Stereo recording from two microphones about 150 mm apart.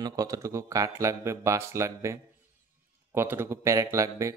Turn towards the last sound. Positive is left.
turn(degrees=-20)  # may be behind; listen again after turning